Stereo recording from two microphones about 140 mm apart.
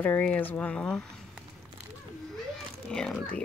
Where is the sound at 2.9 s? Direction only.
5° left (ahead or behind).